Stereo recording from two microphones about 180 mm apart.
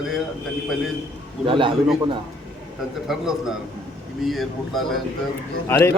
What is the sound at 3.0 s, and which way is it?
A man's voice, centre (ahead or behind).